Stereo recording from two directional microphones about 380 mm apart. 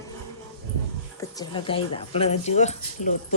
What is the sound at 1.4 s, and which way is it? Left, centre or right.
Speech, centre.